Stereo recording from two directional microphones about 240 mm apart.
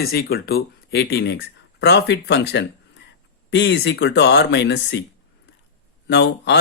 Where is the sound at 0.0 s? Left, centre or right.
Left.